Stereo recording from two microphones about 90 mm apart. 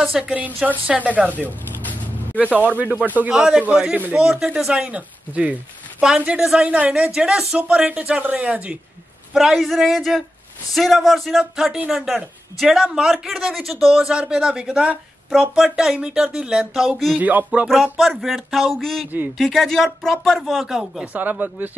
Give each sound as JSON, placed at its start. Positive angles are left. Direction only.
{"t": 0.2, "sound": "speech", "side_deg": -15}
{"t": 2.3, "sound": "a man's voice", "side_deg": -15}
{"t": 17.2, "sound": "speech", "side_deg": -20}
{"t": 17.9, "sound": "a man's voice", "side_deg": 0}
{"t": 21.0, "sound": "speech", "side_deg": -20}